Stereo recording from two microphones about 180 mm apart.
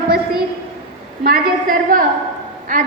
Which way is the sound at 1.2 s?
55° right (ahead or behind).